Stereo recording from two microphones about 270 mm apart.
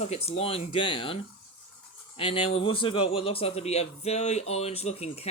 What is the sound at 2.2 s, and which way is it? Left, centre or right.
Speech, left.